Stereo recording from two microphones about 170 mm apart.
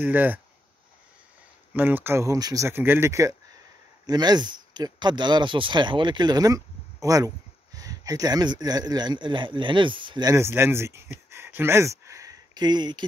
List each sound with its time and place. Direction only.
0.0 s speech: 10° right (ahead or behind)
1.7 s speech: 10° right (ahead or behind); by 13.0 s 25° right (ahead or behind)